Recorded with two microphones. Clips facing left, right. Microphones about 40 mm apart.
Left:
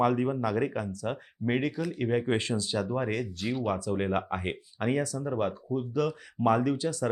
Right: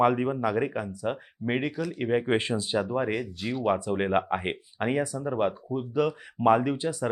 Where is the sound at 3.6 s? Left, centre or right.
Right.